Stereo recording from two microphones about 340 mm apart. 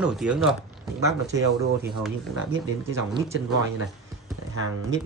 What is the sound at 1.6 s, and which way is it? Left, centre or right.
Speech, right.